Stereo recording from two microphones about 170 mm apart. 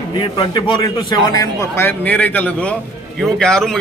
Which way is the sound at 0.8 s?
20° left (ahead or behind).